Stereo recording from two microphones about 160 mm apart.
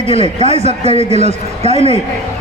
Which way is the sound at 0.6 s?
45° right (ahead or behind).